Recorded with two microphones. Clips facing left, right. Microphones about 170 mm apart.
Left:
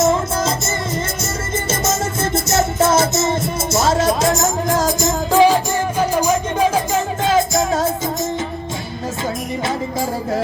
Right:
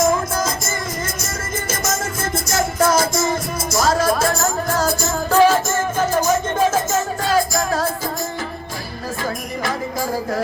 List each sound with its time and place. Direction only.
0.0 s music: 25° left (ahead or behind)
1.8 s music: 25° left (ahead or behind)